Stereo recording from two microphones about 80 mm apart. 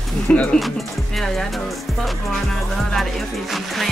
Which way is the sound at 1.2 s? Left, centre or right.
Centre.